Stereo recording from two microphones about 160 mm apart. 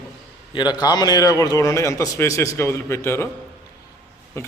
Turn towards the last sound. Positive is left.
turn(degrees=15)  # may be behind; listen again after turning